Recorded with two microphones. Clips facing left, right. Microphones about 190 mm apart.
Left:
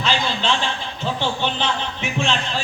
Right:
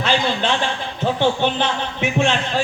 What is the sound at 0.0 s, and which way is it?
A man's voice, 55° right (ahead or behind).